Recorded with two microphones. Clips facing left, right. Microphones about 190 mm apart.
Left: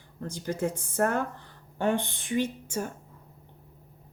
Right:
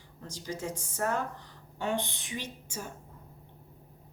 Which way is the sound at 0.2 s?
55° left (ahead or behind).